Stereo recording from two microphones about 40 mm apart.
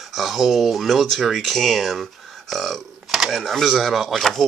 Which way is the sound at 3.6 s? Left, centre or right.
Centre.